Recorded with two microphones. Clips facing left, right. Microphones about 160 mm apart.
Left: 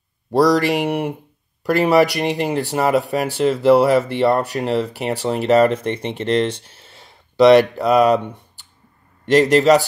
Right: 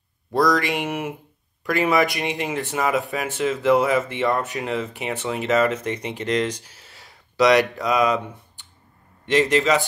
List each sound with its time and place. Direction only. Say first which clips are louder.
0.6 s speech: left 6 dB; 35° left (ahead or behind)
8.2 s speech: left 3 dB; centre (ahead or behind)
9.2 s speech: left 6 dB; 40° left (ahead or behind)